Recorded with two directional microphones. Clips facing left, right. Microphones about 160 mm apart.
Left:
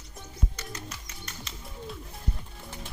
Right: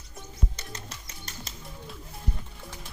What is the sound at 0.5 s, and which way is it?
Music, 30° right (ahead or behind).